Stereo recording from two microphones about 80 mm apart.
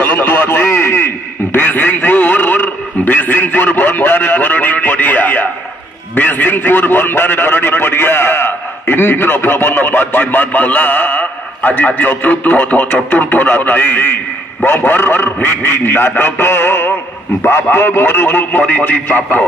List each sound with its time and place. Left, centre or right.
0.0 s a man's voice: left